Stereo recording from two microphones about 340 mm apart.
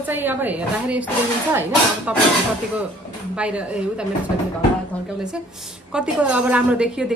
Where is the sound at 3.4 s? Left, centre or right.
Centre.